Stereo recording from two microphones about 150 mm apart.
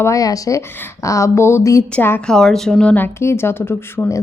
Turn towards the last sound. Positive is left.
turn(degrees=15)  # may be behind; listen again after turning